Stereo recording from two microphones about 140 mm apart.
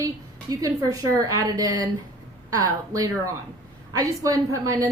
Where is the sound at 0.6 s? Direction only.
25° right (ahead or behind).